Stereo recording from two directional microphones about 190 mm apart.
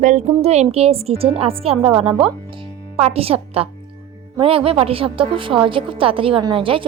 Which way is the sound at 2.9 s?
30° right (ahead or behind).